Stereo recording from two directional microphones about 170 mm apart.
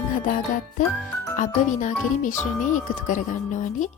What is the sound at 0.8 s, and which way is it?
Speech, 50° left (ahead or behind).